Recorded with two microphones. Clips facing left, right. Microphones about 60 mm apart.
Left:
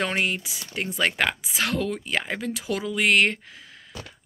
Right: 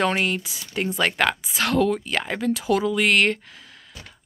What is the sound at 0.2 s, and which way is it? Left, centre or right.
Speech, centre.